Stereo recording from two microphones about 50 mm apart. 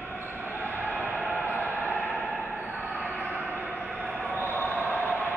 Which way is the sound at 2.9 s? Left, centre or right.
Right.